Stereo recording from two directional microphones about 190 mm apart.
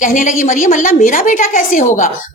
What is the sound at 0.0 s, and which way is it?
A woman's voice, 45° left (ahead or behind).